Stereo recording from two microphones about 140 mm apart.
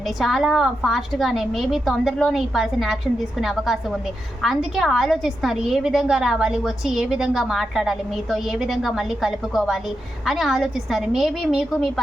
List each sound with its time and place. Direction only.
0.2 s a woman's voice: centre (ahead or behind)